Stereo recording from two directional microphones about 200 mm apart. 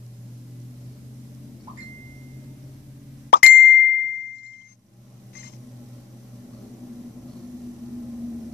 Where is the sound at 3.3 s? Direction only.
50° left (ahead or behind).